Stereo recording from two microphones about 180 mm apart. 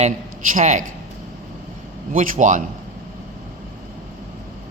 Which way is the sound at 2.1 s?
45° right (ahead or behind).